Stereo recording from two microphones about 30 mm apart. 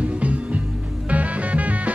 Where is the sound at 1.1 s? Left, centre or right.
Right.